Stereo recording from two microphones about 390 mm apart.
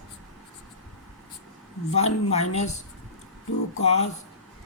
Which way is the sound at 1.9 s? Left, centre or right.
Centre.